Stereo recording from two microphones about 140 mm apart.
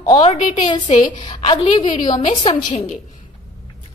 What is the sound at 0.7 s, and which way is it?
A woman's voice, 35° left (ahead or behind).